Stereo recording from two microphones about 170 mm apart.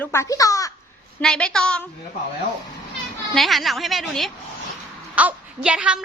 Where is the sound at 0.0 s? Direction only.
15° left (ahead or behind).